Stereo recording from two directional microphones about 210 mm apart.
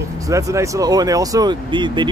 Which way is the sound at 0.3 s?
15° right (ahead or behind).